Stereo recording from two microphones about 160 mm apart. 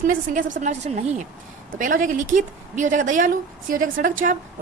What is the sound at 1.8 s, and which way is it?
Speech, 55° right (ahead or behind).